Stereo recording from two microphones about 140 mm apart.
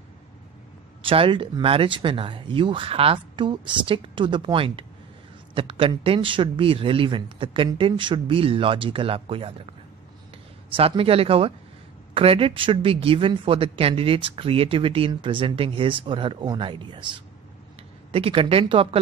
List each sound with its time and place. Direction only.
1.0 s speech: 40° right (ahead or behind)
10.8 s speech: 45° right (ahead or behind)